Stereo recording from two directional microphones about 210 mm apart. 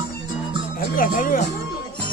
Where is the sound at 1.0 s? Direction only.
40° left (ahead or behind).